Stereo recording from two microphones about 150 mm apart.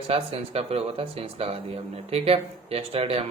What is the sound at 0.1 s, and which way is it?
Speech, 40° right (ahead or behind).